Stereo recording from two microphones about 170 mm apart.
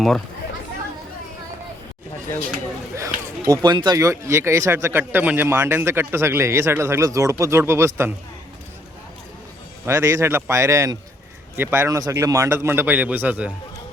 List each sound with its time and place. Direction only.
2.9 s speech: 20° right (ahead or behind)
9.8 s speech: 15° right (ahead or behind)